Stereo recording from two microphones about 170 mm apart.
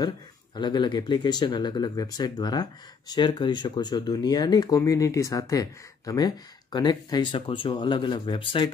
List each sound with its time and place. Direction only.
0.6 s speech: 25° left (ahead or behind)